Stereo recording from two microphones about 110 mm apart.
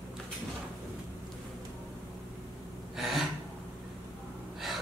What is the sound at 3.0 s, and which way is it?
Gasp, centre (ahead or behind).